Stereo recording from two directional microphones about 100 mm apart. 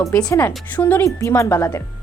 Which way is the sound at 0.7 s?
20° left (ahead or behind).